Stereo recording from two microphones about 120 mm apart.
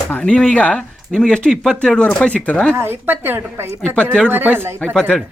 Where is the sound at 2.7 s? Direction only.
20° right (ahead or behind).